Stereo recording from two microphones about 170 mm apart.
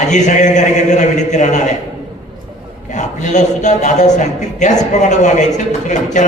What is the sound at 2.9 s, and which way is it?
A man's voice, 45° left (ahead or behind).